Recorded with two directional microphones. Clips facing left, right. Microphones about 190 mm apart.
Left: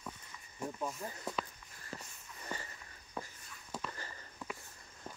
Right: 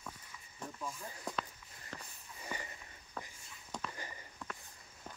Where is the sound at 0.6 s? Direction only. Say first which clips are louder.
Left 6 dB; 10° left (ahead or behind).